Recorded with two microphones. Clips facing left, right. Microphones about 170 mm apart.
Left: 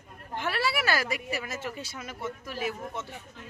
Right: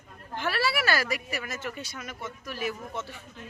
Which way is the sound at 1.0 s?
25° left (ahead or behind).